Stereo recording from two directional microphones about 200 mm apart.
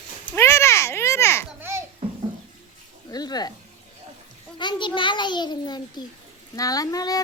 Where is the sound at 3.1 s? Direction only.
20° left (ahead or behind).